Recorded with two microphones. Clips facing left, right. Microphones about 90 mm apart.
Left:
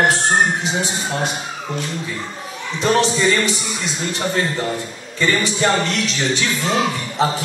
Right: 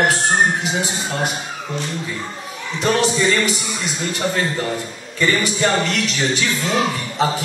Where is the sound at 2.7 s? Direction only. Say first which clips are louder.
Left 1 dB; 30° left (ahead or behind).